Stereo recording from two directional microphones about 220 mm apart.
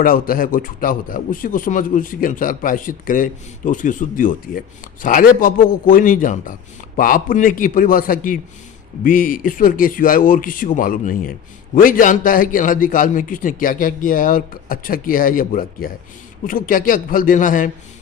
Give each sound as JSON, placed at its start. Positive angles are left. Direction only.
{"t": 0.0, "sound": "speech", "side_deg": 40}